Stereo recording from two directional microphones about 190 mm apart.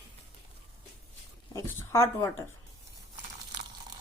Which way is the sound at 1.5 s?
15° left (ahead or behind).